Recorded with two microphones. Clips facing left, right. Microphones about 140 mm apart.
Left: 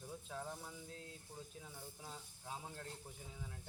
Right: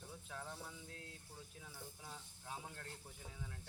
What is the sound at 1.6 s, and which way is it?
Speech, 15° left (ahead or behind).